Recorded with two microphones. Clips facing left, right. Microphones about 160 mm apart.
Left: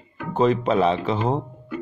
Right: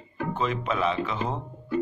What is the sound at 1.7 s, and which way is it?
Music, 30° right (ahead or behind).